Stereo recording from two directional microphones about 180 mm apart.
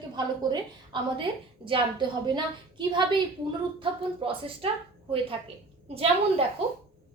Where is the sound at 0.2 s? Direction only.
25° right (ahead or behind).